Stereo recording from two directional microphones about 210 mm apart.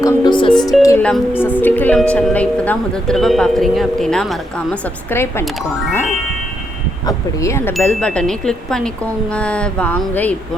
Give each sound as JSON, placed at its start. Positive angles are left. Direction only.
{"t": 0.0, "sound": "music", "side_deg": 20}
{"t": 0.5, "sound": "speech", "side_deg": 0}
{"t": 0.8, "sound": "speech", "side_deg": 10}
{"t": 7.0, "sound": "speech", "side_deg": 15}